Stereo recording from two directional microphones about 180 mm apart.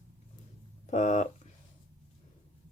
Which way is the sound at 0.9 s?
40° left (ahead or behind).